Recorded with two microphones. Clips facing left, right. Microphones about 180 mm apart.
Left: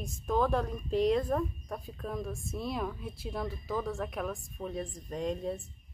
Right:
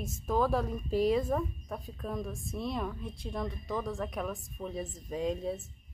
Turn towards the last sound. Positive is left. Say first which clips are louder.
# right 1 dB
turn(degrees=0)  # may be behind; listen again after turning